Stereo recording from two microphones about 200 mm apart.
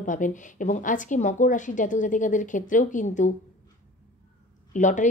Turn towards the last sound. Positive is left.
turn(degrees=40)  # may be behind; listen again after turning